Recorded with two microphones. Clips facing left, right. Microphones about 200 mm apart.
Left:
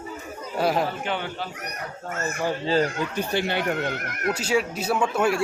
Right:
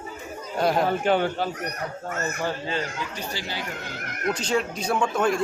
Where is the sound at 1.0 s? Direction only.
45° right (ahead or behind).